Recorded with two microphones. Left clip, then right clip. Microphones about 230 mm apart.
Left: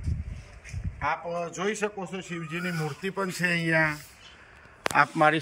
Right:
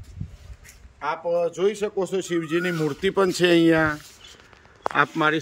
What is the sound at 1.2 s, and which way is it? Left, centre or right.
Speech, right.